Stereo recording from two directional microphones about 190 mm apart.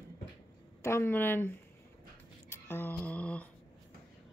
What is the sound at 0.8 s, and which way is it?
Speech, 10° left (ahead or behind).